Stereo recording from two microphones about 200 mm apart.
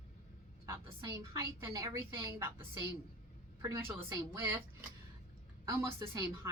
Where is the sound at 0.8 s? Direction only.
25° right (ahead or behind).